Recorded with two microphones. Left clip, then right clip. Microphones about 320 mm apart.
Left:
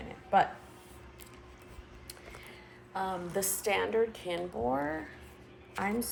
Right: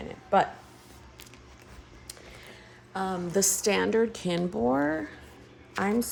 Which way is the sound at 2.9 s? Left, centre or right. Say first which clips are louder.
Right 4 dB; right.